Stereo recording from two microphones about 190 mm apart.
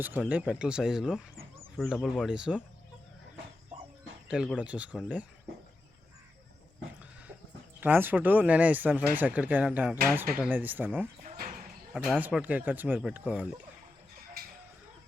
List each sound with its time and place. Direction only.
0.0 s speech: 10° right (ahead or behind)
4.3 s speech: 5° right (ahead or behind)
7.8 s speech: 10° right (ahead or behind)
11.2 s a sound: 40° right (ahead or behind)
11.9 s speech: 5° right (ahead or behind)